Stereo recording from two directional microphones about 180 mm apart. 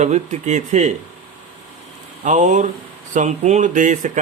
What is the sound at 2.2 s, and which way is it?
Speech, 45° right (ahead or behind).